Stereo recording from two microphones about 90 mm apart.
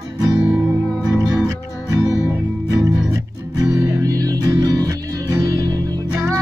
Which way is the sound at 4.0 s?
40° right (ahead or behind).